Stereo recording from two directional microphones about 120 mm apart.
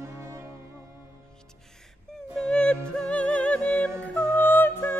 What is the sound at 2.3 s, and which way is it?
Music, 5° left (ahead or behind).